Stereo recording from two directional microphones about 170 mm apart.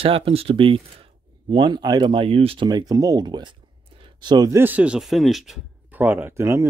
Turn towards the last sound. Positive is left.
turn(degrees=-15)  # may be behind; listen again after turning